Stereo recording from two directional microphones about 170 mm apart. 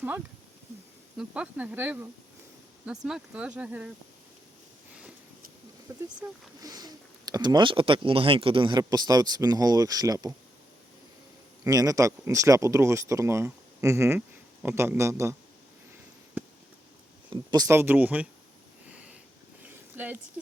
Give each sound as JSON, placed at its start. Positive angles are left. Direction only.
{"t": 1.1, "sound": "speech", "side_deg": -5}
{"t": 5.9, "sound": "speech", "side_deg": -20}
{"t": 11.6, "sound": "speech", "side_deg": -20}
{"t": 16.4, "sound": "a sound", "side_deg": -10}
{"t": 17.2, "sound": "speech", "side_deg": -25}
{"t": 18.9, "sound": "a sound", "side_deg": -5}